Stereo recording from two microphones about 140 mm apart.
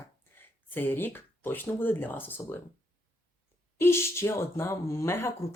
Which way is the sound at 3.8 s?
20° left (ahead or behind).